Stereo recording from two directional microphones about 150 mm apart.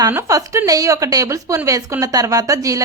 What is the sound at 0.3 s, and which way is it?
A woman's voice, 20° right (ahead or behind).